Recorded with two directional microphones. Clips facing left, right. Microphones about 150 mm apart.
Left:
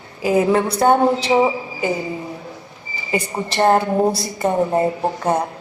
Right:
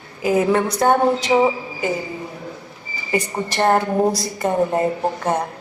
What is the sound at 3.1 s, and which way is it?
A woman's voice, 25° left (ahead or behind).